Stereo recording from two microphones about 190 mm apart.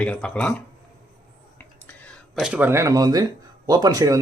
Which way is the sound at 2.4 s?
5° right (ahead or behind).